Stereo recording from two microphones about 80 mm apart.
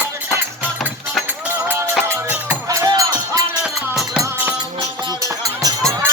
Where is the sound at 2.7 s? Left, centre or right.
Right.